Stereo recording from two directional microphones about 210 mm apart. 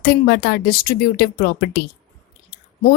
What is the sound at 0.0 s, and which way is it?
A woman's voice, 50° left (ahead or behind).